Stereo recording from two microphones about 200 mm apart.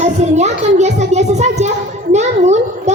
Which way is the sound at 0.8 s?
35° right (ahead or behind).